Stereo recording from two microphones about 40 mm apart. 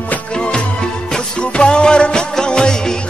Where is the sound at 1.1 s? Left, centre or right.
Left.